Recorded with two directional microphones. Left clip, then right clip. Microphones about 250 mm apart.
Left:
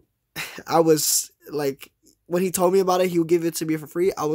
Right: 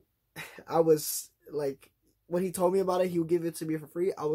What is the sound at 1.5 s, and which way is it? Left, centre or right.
Speech, left.